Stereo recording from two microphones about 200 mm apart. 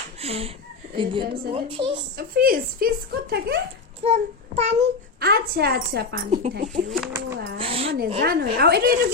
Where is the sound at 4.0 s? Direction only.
30° right (ahead or behind).